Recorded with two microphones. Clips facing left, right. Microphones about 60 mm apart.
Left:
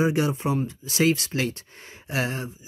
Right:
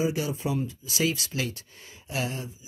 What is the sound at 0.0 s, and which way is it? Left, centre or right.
Speech, left.